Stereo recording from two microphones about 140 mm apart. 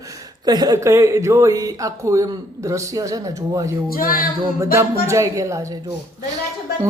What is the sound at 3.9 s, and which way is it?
Speech, 90° left.